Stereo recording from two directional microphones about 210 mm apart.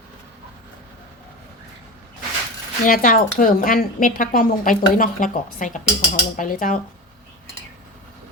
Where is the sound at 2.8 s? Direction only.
40° left (ahead or behind).